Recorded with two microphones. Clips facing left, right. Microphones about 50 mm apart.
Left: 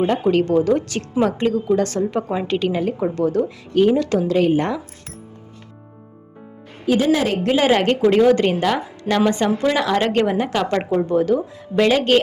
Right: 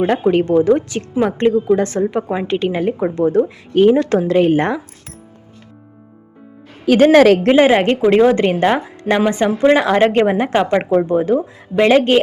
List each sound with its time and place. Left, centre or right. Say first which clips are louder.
0.0 s a woman's voice: right 3 dB; right
7.0 s speech: right 12 dB; right
7.5 s a woman's voice: right 5 dB; right